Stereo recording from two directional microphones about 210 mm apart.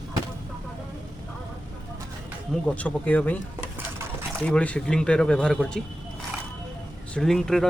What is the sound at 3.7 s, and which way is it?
Stir, 10° right (ahead or behind).